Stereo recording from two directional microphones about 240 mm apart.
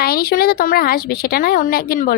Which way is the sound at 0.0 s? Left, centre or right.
Left.